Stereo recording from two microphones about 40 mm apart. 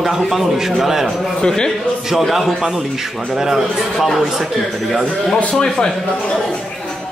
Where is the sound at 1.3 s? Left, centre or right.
Centre.